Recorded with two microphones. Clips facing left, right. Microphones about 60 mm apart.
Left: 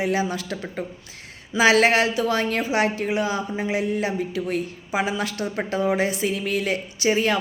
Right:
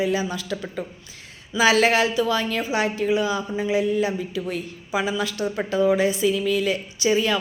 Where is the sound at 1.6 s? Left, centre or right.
Left.